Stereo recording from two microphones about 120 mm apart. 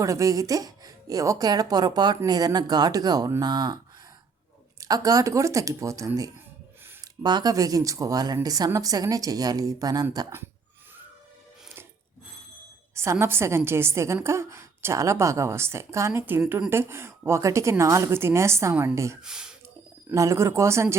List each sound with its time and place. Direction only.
0.0 s a woman's voice: 25° right (ahead or behind)
4.8 s a woman's voice: 30° right (ahead or behind)
7.2 s a woman's voice: 35° right (ahead or behind)
12.9 s a woman's voice: 20° right (ahead or behind)
19.2 s speech: 5° right (ahead or behind)
20.1 s a woman's voice: 25° right (ahead or behind)